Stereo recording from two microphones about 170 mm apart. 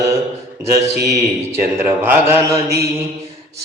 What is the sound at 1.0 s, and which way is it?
Speech, 70° right (ahead or behind).